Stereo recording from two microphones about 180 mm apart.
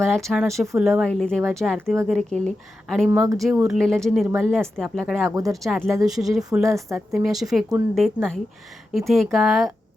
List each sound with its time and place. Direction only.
0.0 s speech: centre (ahead or behind)
3.1 s a woman's voice: 15° right (ahead or behind)
3.6 s speech: centre (ahead or behind)
4.3 s a woman's voice: 10° right (ahead or behind)
4.8 s speech: centre (ahead or behind)
5.3 s speech: 20° right (ahead or behind)
5.6 s speech: centre (ahead or behind)
6.7 s a woman's voice: 15° right (ahead or behind)
7.1 s speech: centre (ahead or behind)